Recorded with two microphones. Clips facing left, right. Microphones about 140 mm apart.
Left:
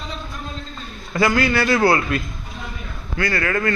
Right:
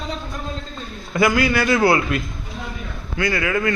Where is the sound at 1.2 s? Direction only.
15° right (ahead or behind).